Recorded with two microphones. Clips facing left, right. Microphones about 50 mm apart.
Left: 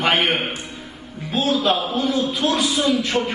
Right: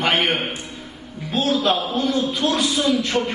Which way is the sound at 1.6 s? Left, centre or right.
Centre.